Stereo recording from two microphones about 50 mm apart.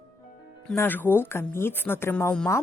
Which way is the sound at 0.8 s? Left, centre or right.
Left.